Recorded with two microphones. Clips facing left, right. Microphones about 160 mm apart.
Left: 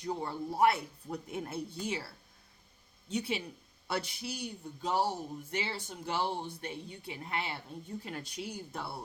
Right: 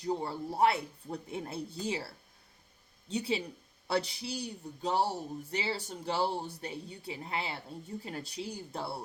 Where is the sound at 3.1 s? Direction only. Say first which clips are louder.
Right 2 dB; 30° right (ahead or behind).